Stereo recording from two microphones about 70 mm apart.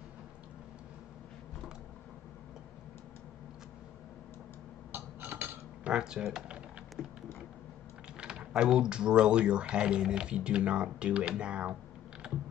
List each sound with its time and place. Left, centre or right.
4.9 s a sound: right
5.9 s typing: centre
8.2 s speech: centre
12.2 s computer keyboard: centre